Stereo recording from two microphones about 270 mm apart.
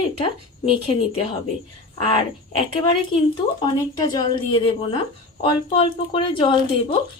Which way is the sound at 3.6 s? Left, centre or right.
Centre.